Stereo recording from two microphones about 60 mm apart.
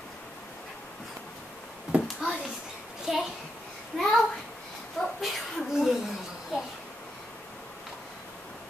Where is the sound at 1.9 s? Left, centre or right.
Right.